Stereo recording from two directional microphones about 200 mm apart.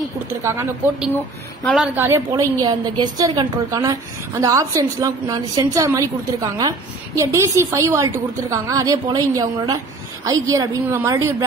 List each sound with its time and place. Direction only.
0.3 s a woman's voice: 15° right (ahead or behind)
2.0 s a woman's voice: 10° right (ahead or behind)